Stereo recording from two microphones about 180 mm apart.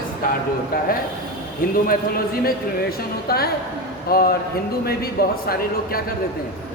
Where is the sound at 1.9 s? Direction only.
55° left (ahead or behind).